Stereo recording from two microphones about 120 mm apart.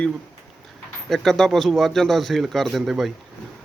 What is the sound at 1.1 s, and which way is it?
Speech, 5° left (ahead or behind).